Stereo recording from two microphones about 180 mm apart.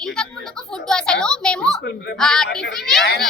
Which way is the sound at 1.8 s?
65° left (ahead or behind).